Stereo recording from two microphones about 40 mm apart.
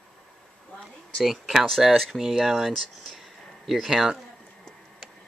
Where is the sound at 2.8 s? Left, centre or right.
Centre.